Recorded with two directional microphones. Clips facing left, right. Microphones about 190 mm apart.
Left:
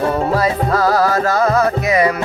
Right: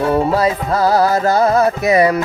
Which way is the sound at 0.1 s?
25° right (ahead or behind).